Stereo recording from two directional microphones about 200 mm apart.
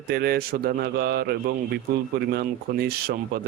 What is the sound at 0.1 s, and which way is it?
Speech, 50° right (ahead or behind).